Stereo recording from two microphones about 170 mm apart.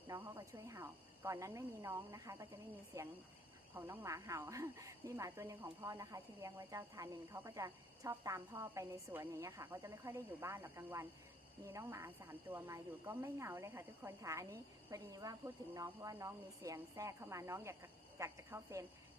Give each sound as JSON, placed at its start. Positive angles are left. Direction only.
{"t": 0.1, "sound": "speech", "side_deg": -20}